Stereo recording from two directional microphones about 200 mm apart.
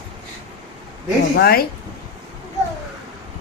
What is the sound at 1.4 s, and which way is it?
Speech, 50° left (ahead or behind).